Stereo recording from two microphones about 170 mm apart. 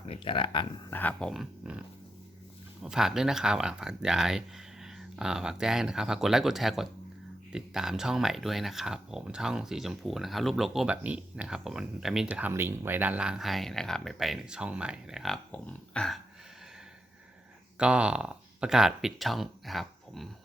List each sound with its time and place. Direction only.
0.0 s speech: 30° left (ahead or behind)
0.9 s speech: 10° left (ahead or behind)
1.3 s speech: 5° right (ahead or behind)
2.8 s speech: 5° right (ahead or behind)
17.7 s speech: 5° right (ahead or behind)